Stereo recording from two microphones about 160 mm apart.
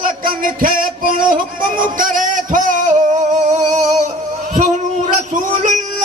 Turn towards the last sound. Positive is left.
turn(degrees=-50)  # may be behind; listen again after turning